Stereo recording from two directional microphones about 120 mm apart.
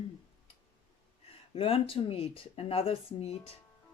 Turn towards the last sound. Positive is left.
turn(degrees=55)  # may be behind; listen again after turning